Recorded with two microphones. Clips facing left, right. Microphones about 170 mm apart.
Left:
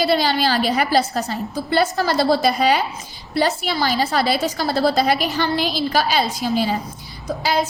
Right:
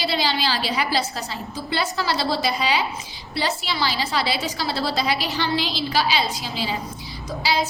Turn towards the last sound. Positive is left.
turn(degrees=50)  # may be behind; listen again after turning